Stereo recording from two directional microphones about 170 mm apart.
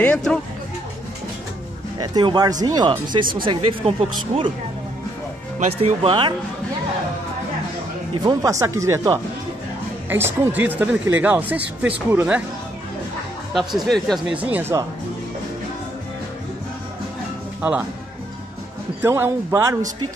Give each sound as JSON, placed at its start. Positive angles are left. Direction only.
{"t": 0.0, "sound": "speech", "side_deg": 5}
{"t": 2.0, "sound": "speech", "side_deg": -25}
{"t": 5.6, "sound": "speech", "side_deg": -40}
{"t": 8.1, "sound": "speech", "side_deg": -25}
{"t": 13.5, "sound": "speech", "side_deg": 0}
{"t": 17.6, "sound": "speech", "side_deg": -10}
{"t": 18.9, "sound": "speech", "side_deg": -15}